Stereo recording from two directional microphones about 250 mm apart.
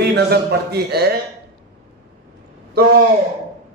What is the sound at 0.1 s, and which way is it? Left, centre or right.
A man's voice, right.